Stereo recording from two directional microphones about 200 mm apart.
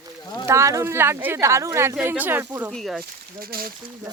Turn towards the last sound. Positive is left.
turn(degrees=-45)  # may be behind; listen again after turning